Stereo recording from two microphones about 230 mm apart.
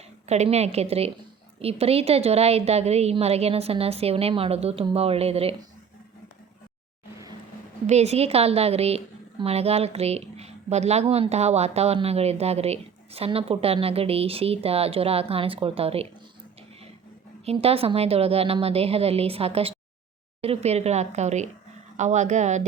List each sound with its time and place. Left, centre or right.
0.3 s speech: right
7.9 s speech: right
17.4 s speech: right